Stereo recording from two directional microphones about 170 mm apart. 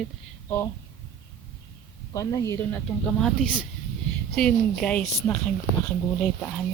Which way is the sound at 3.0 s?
5° left (ahead or behind).